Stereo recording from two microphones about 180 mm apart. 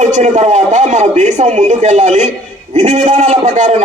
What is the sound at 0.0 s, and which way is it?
A man's voice, 40° right (ahead or behind).